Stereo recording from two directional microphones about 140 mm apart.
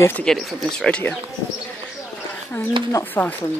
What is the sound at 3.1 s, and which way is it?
Speech, 10° left (ahead or behind).